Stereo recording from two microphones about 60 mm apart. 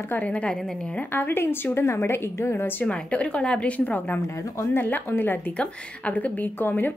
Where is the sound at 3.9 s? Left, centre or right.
Left.